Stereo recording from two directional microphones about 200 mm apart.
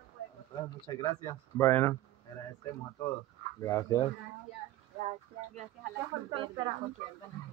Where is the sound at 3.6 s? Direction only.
15° left (ahead or behind).